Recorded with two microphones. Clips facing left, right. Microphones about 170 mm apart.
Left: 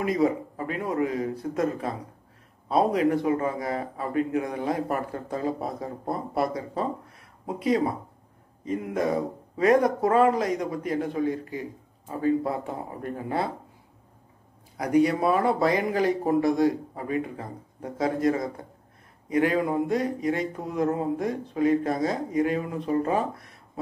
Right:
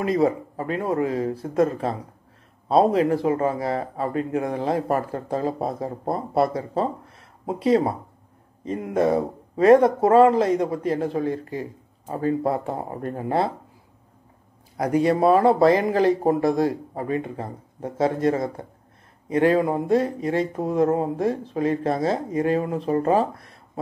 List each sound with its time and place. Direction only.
0.0 s speech: 30° right (ahead or behind)
12.1 s speech: 40° right (ahead or behind)
15.0 s speech: 30° right (ahead or behind)